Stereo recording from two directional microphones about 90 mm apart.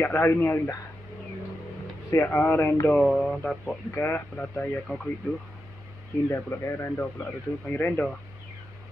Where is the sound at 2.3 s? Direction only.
20° left (ahead or behind).